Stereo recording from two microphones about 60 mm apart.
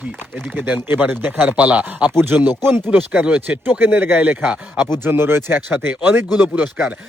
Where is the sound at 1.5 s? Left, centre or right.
Right.